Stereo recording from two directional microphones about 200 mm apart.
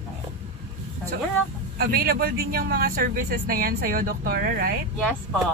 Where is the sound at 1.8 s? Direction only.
50° right (ahead or behind).